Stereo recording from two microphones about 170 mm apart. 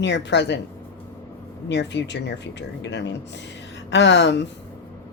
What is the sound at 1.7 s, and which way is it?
Speech, 90° left.